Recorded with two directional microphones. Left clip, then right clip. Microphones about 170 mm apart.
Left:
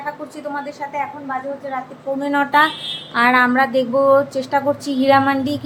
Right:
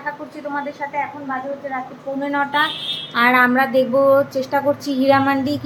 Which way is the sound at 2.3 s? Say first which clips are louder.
Left 4 dB; 60° left (ahead or behind).